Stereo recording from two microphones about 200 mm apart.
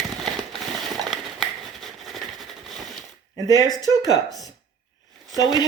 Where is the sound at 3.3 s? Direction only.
20° left (ahead or behind).